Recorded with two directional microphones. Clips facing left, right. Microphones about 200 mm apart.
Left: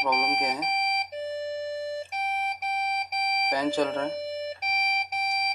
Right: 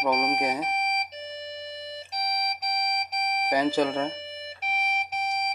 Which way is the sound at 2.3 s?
40° right (ahead or behind).